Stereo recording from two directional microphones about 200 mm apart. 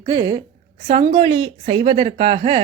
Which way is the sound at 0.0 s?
20° right (ahead or behind).